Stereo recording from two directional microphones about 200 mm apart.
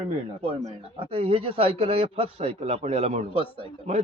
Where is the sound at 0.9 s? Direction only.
30° right (ahead or behind).